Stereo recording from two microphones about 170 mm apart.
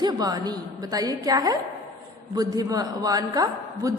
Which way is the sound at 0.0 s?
25° right (ahead or behind).